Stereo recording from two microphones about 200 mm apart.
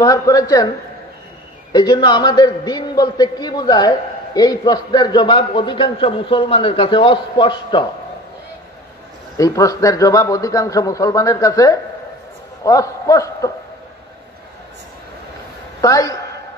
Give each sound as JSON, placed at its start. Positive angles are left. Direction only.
{"t": 0.0, "sound": "a man's voice", "side_deg": 15}
{"t": 1.7, "sound": "a man's voice", "side_deg": 20}
{"t": 9.4, "sound": "a man's voice", "side_deg": 15}
{"t": 15.8, "sound": "a man's voice", "side_deg": 15}